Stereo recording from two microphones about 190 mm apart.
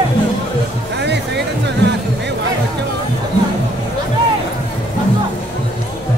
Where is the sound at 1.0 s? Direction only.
65° right (ahead or behind).